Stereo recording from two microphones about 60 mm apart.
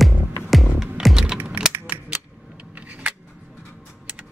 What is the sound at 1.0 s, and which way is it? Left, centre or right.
Computer keyboard, centre.